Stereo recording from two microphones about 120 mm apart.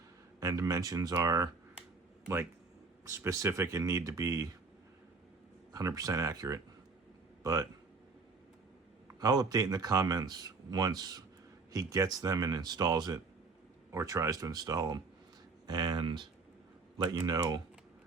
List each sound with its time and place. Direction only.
0.3 s speech: 30° right (ahead or behind)
2.2 s speech: 15° right (ahead or behind)
5.7 s speech: 30° right (ahead or behind)
9.2 s speech: 30° right (ahead or behind)